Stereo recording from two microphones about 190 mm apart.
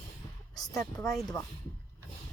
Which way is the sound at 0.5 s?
20° left (ahead or behind).